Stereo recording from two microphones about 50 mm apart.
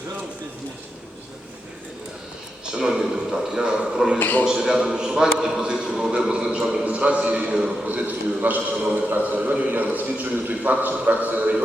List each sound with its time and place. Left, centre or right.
2.9 s a man's voice: centre
4.2 s a man's voice: left
4.4 s a man's voice: centre
6.8 s a man's voice: right
7.9 s a man's voice: right